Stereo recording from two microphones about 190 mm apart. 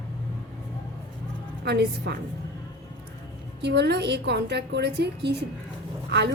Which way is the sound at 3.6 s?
65° right (ahead or behind).